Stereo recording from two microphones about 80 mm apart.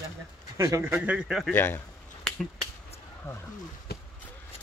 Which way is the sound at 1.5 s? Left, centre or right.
Left.